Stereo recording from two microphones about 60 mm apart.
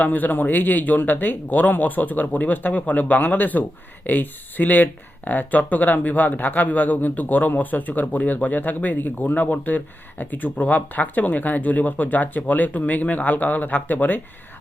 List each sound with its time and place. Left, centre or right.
0.0 s speech: left